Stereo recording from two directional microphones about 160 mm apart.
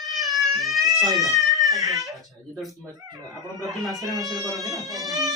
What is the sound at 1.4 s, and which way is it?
Baby cry, centre (ahead or behind).